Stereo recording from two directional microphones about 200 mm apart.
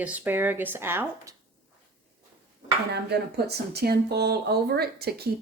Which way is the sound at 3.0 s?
55° right (ahead or behind).